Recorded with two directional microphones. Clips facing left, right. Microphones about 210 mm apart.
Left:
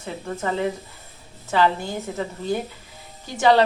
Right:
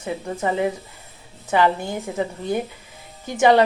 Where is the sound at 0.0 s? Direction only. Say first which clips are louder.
Right 3 dB; 15° right (ahead or behind).